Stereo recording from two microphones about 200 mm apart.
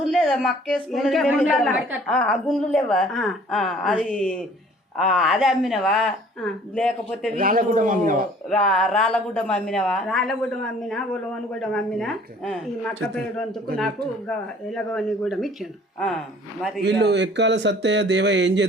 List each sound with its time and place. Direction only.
0.0 s a woman's voice: centre (ahead or behind)
7.3 s speech: 45° right (ahead or behind)
8.4 s a woman's voice: 5° left (ahead or behind)
17.0 s speech: 60° right (ahead or behind)